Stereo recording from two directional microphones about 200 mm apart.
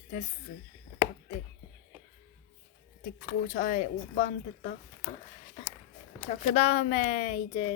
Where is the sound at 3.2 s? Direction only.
40° left (ahead or behind).